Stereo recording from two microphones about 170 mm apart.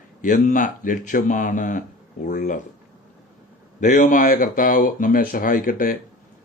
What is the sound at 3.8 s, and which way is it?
Speech, 50° left (ahead or behind).